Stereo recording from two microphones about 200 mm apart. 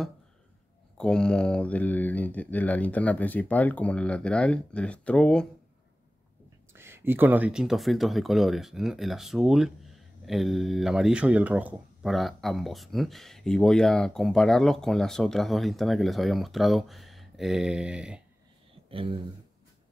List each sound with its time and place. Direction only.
0.9 s speech: 5° left (ahead or behind)
6.7 s speech: 10° right (ahead or behind)
18.9 s speech: 25° right (ahead or behind)